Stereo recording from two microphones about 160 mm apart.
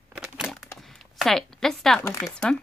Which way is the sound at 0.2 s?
Centre (ahead or behind).